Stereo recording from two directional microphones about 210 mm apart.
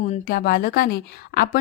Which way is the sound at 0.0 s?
40° left (ahead or behind).